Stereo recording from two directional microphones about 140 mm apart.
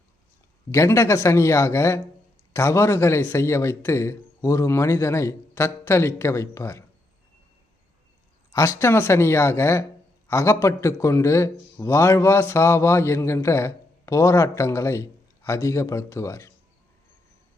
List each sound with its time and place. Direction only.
0.7 s speech: 20° left (ahead or behind)
8.5 s speech: 20° left (ahead or behind)